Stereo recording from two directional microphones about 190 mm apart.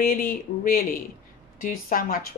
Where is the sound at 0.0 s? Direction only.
45° left (ahead or behind).